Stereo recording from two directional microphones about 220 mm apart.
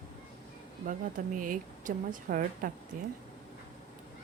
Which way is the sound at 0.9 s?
35° right (ahead or behind).